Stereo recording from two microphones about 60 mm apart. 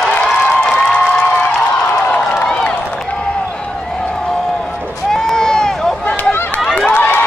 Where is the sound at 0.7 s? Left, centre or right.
Left.